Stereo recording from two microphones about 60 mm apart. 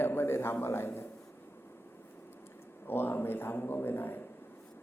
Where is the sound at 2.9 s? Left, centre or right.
Left.